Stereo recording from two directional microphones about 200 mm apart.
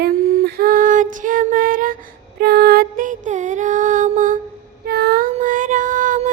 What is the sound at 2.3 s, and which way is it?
Music, 50° right (ahead or behind).